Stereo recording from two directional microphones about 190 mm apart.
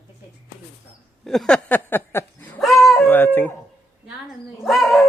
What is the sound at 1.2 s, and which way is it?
Dog, 5° left (ahead or behind).